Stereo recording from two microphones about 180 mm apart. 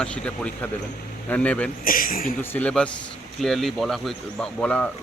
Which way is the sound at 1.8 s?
50° left (ahead or behind).